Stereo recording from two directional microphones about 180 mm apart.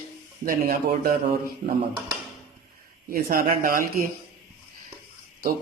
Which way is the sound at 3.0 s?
50° right (ahead or behind).